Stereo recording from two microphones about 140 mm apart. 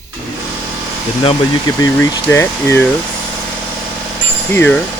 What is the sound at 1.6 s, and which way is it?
Speech, 20° left (ahead or behind).